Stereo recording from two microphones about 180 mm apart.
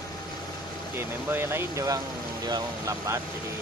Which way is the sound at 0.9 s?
10° right (ahead or behind).